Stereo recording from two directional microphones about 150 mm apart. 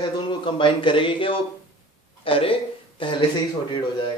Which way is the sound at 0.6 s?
35° left (ahead or behind).